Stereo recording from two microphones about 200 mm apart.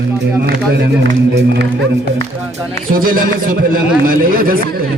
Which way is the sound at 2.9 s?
45° right (ahead or behind).